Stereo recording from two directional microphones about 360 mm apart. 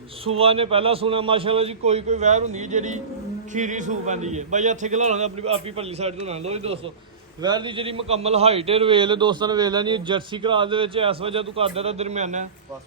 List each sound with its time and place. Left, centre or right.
0.3 s a man's voice: centre